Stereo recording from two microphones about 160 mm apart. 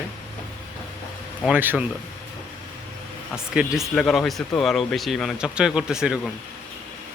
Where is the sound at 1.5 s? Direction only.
10° right (ahead or behind).